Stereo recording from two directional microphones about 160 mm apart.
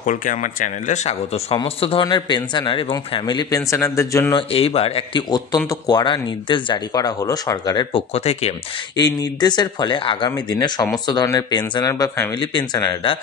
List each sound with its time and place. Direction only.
0.0 s speech: 55° left (ahead or behind); by 4.4 s 20° left (ahead or behind)
4.4 s speech: 35° left (ahead or behind)
8.9 s speech: 25° left (ahead or behind)